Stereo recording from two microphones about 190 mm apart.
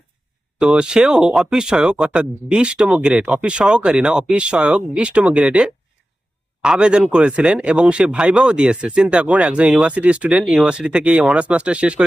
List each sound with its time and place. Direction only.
0.6 s speech: 5° right (ahead or behind)